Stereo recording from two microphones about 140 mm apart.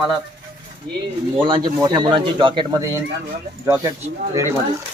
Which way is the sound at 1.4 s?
35° right (ahead or behind).